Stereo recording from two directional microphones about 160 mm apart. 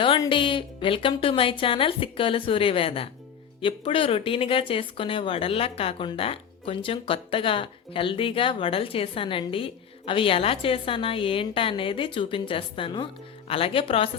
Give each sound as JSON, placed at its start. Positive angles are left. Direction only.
{"t": 0.3, "sound": "speech", "side_deg": 30}